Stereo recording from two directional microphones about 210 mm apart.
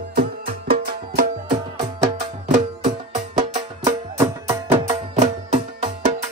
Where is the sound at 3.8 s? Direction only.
15° right (ahead or behind).